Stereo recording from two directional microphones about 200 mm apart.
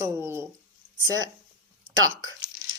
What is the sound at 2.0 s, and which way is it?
Speech, 85° right.